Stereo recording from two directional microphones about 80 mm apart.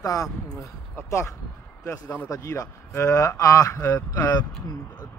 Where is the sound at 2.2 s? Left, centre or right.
Left.